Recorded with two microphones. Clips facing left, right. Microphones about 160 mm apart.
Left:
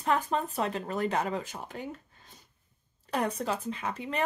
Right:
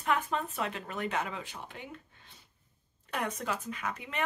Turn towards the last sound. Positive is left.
turn(degrees=30)  # may be behind; listen again after turning